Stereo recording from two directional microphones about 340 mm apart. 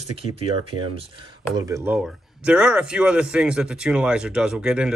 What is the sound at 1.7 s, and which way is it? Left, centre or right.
Speech, centre.